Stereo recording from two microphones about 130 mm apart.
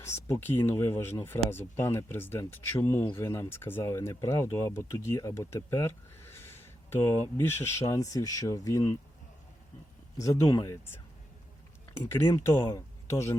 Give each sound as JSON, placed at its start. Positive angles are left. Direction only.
{"t": 0.0, "sound": "speech", "side_deg": 20}
{"t": 10.2, "sound": "speech", "side_deg": 25}
{"t": 12.1, "sound": "speech", "side_deg": 20}